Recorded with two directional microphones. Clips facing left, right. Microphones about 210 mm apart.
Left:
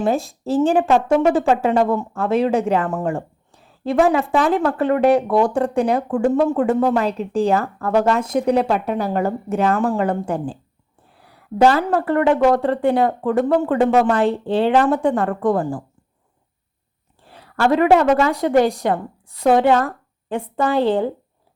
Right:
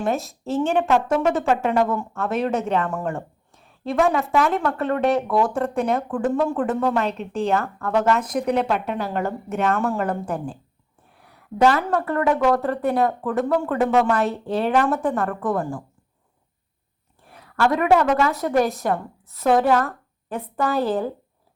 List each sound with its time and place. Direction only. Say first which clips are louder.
0.4 s a woman's voice: left 4 dB; 35° left (ahead or behind)
17.2 s speech: left 3 dB; 30° left (ahead or behind)